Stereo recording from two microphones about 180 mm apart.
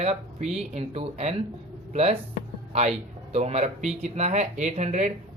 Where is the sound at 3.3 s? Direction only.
35° right (ahead or behind).